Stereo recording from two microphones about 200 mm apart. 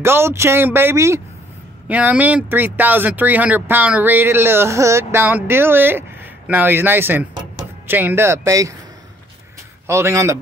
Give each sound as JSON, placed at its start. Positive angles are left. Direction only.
{"t": 0.0, "sound": "speech", "side_deg": -10}
{"t": 9.8, "sound": "speech", "side_deg": -15}